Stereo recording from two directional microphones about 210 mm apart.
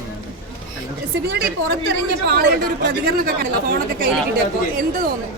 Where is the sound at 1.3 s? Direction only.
50° right (ahead or behind).